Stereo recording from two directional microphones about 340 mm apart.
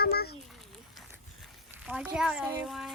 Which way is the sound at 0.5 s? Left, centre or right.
Centre.